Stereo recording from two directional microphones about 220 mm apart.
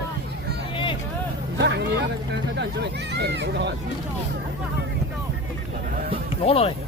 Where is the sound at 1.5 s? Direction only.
50° right (ahead or behind).